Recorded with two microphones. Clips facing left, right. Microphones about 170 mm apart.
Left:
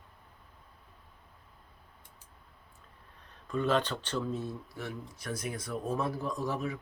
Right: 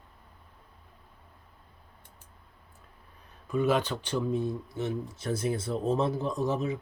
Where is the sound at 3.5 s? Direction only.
10° right (ahead or behind).